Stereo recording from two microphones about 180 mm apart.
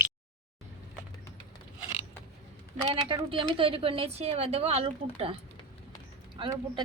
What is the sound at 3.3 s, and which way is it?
A woman's voice, 30° right (ahead or behind).